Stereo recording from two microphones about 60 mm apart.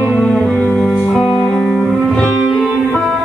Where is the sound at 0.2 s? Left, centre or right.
Centre.